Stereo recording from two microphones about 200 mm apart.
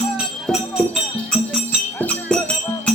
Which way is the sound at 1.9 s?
10° left (ahead or behind).